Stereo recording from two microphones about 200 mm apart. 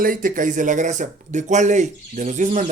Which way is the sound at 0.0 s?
45° right (ahead or behind).